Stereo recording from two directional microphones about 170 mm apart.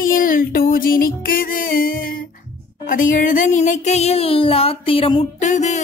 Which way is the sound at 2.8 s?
50° left (ahead or behind).